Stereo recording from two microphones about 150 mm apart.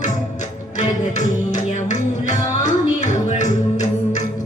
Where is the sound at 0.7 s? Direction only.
55° left (ahead or behind).